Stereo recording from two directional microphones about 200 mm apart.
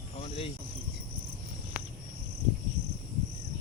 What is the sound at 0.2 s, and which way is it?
Cricket, 30° left (ahead or behind).